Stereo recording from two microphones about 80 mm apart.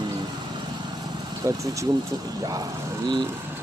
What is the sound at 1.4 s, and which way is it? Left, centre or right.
Speech, right.